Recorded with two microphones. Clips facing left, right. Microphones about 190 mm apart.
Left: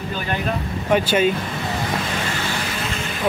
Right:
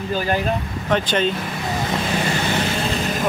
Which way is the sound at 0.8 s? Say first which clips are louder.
Left 2 dB; 10° left (ahead or behind).